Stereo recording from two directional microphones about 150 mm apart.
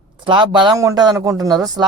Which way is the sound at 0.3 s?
30° right (ahead or behind).